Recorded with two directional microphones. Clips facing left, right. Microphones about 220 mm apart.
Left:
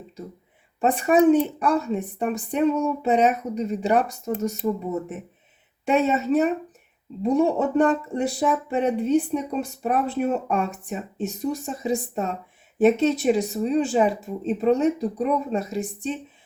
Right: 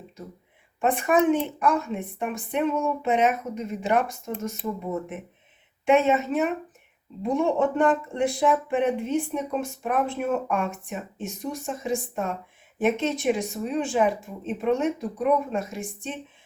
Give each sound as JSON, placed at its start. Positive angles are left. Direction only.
{"t": 0.8, "sound": "speech", "side_deg": 35}
{"t": 5.8, "sound": "speech", "side_deg": 35}